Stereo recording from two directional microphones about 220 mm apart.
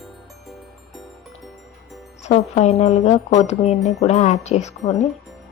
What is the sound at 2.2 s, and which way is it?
Speech, 30° left (ahead or behind).